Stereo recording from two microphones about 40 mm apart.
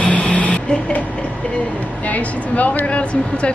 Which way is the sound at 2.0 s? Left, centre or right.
Left.